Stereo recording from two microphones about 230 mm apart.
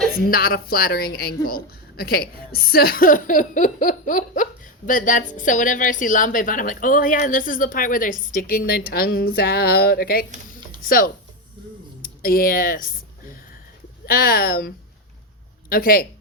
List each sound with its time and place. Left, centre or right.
0.3 s a woman's voice: left
12.2 s a woman's voice: left
14.1 s a woman's voice: left
15.7 s a woman's voice: left